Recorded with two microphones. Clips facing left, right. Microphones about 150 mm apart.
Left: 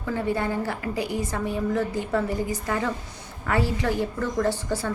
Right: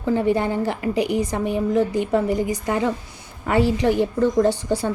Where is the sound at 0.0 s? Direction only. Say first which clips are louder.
Right 6 dB; 20° right (ahead or behind).